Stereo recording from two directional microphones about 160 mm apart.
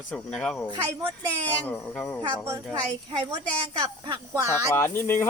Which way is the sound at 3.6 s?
30° right (ahead or behind).